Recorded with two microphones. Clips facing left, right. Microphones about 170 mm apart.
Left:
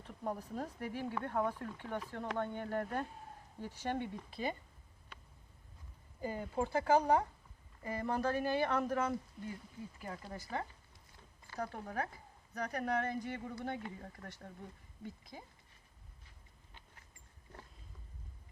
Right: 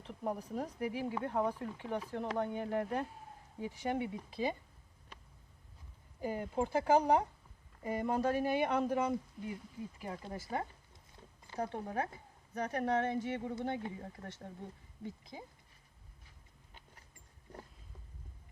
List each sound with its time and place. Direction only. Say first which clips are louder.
0.1 s speech: right 2 dB; 10° right (ahead or behind)
6.1 s speech: right 2 dB; 10° right (ahead or behind)
10.5 s speech: right 2 dB; 25° right (ahead or behind)